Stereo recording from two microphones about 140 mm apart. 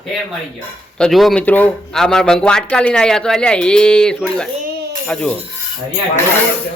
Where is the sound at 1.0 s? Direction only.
Centre (ahead or behind).